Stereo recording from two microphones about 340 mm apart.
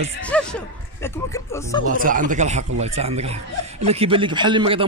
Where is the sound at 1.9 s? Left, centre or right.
Right.